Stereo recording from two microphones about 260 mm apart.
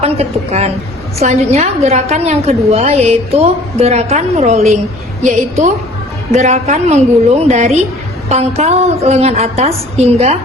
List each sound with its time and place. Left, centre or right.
0.0 s a woman's voice: right